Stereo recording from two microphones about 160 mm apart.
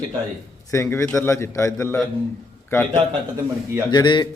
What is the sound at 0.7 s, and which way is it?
Speech, 20° left (ahead or behind).